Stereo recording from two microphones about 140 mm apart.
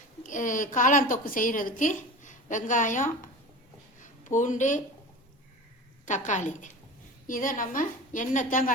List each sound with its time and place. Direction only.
0.2 s a woman's voice: 65° left (ahead or behind)
6.1 s a woman's voice: 60° left (ahead or behind)
7.3 s a woman's voice: 75° left (ahead or behind)